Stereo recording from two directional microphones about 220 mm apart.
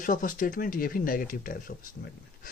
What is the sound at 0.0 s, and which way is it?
Speech, 40° left (ahead or behind).